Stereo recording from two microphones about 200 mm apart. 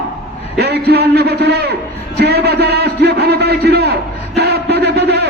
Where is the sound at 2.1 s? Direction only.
55° right (ahead or behind).